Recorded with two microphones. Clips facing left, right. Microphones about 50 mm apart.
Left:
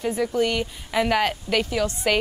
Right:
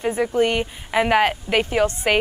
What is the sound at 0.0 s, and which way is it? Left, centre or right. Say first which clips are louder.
Speech: right 3 dB; right.